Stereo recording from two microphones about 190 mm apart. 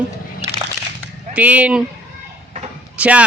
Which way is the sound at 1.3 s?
5° right (ahead or behind).